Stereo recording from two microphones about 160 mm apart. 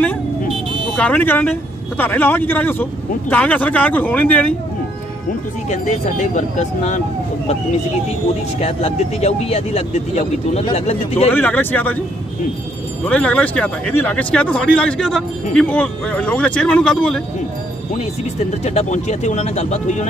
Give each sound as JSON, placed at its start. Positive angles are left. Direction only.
{"t": 0.9, "sound": "speech", "side_deg": 10}
{"t": 5.7, "sound": "speech", "side_deg": 50}
{"t": 8.5, "sound": "speech", "side_deg": 40}
{"t": 11.3, "sound": "speech", "side_deg": 10}
{"t": 13.1, "sound": "speech", "side_deg": 10}
{"t": 18.6, "sound": "speech", "side_deg": 45}